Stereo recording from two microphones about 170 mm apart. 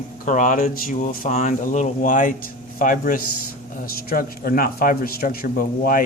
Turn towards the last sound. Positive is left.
turn(degrees=55)  # may be behind; listen again after turning